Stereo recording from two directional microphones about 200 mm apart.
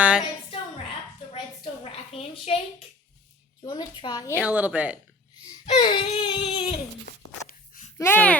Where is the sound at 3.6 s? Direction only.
20° left (ahead or behind).